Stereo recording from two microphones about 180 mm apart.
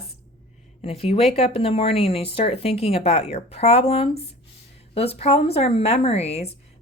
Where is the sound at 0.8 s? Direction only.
35° left (ahead or behind).